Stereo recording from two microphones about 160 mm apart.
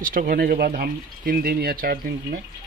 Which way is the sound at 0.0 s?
60° right (ahead or behind).